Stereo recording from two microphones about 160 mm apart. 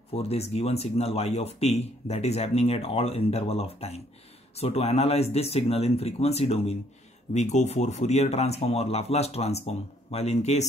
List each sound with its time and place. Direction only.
0.1 s speech: 40° left (ahead or behind)